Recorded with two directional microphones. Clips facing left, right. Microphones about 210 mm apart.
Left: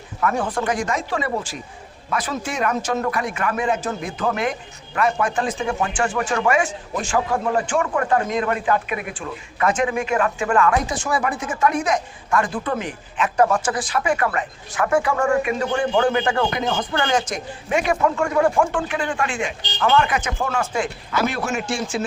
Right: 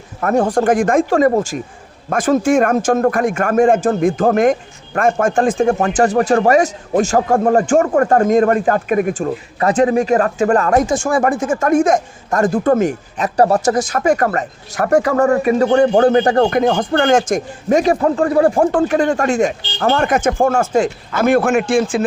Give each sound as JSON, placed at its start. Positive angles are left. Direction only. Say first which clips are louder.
{"t": 0.2, "sound": "a man's voice", "louder": "right 8 dB", "side_deg": -45}